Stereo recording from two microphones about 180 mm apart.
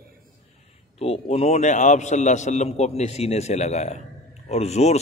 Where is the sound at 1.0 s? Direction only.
35° left (ahead or behind).